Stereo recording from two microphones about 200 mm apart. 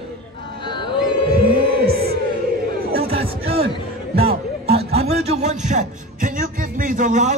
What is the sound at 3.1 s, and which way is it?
Music, 30° right (ahead or behind).